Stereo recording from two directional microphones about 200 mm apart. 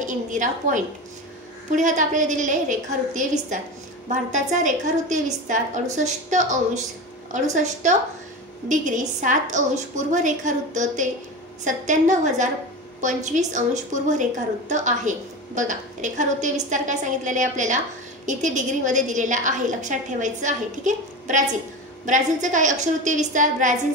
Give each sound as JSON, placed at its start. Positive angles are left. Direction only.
{"t": 0.0, "sound": "a woman's voice", "side_deg": -40}